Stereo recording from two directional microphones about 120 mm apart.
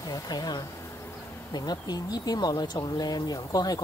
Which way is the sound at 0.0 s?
30° left (ahead or behind).